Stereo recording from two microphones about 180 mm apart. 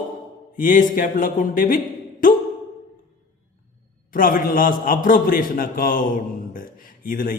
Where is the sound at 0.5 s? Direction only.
50° left (ahead or behind).